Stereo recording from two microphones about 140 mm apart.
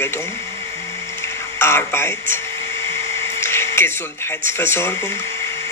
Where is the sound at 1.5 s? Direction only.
15° left (ahead or behind).